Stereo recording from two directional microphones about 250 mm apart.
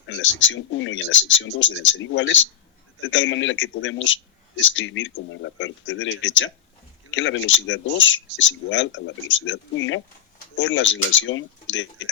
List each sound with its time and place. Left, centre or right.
0.1 s a man's voice: left